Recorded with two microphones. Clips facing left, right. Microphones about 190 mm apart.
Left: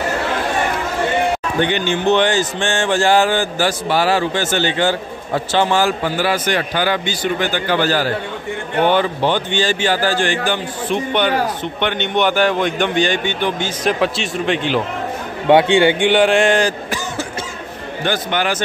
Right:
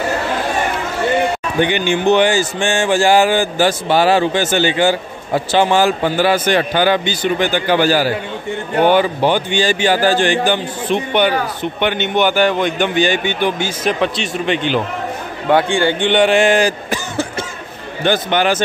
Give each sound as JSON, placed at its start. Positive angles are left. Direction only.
{"t": 1.6, "sound": "a man's voice", "side_deg": -10}
{"t": 3.6, "sound": "a man's voice", "side_deg": -20}
{"t": 13.9, "sound": "a man's voice", "side_deg": 5}
{"t": 15.4, "sound": "speech", "side_deg": 20}
{"t": 16.1, "sound": "a man's voice", "side_deg": 0}
{"t": 16.9, "sound": "cough", "side_deg": -25}
{"t": 18.0, "sound": "a man's voice", "side_deg": -25}